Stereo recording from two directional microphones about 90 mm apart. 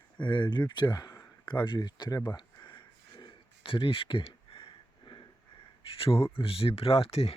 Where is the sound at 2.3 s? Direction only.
55° left (ahead or behind); by 5.2 s 70° left (ahead or behind).